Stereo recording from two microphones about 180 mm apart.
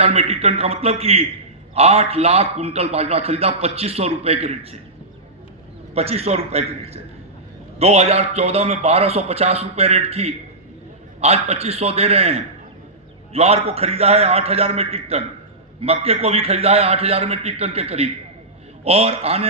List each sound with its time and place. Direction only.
0.0 s a man's voice: 35° right (ahead or behind)
5.9 s a man's voice: 35° right (ahead or behind)